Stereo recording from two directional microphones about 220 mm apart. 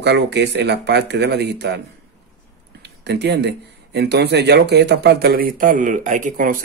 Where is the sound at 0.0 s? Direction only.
50° right (ahead or behind).